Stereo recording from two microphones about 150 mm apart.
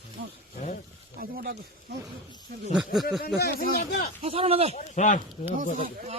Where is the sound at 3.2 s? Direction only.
90° left.